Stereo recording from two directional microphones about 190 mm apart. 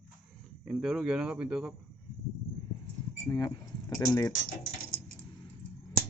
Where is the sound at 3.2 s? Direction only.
20° left (ahead or behind).